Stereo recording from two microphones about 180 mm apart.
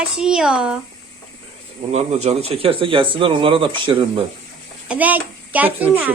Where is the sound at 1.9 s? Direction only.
35° right (ahead or behind).